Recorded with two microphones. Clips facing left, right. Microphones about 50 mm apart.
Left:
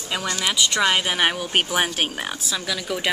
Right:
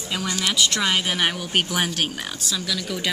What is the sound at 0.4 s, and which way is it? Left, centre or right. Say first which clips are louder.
Speech: left 2 dB; centre.